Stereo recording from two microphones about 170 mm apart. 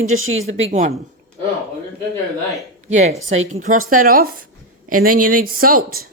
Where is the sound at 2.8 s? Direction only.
45° right (ahead or behind); by 5.8 s 60° right (ahead or behind).